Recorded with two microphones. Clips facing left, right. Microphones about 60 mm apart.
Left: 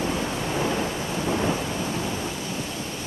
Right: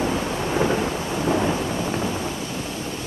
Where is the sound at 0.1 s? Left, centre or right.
Centre.